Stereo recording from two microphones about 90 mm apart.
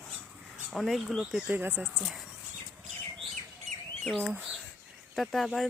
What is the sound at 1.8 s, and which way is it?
Speech, 5° right (ahead or behind).